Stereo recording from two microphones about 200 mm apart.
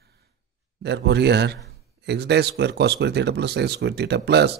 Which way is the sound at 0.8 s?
55° right (ahead or behind).